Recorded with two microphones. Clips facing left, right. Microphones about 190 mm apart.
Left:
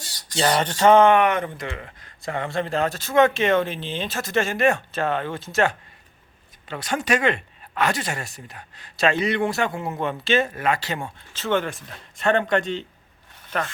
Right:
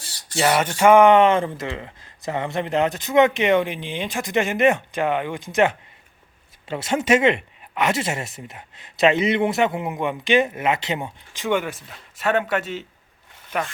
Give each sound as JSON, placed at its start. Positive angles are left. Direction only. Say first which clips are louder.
{"t": 0.3, "sound": "speech", "louder": "right 2 dB", "side_deg": -10}
{"t": 1.1, "sound": "speech", "louder": "right 4 dB", "side_deg": -25}